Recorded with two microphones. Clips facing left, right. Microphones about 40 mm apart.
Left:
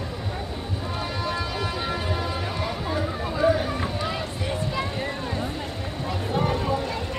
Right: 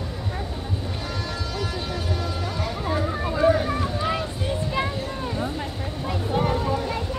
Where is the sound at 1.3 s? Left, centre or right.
Centre.